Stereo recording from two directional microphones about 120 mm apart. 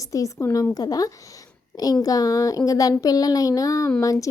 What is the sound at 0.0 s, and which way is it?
A child's voice, 25° left (ahead or behind).